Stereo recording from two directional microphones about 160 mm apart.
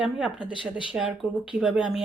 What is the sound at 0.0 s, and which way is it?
Speech, 5° right (ahead or behind).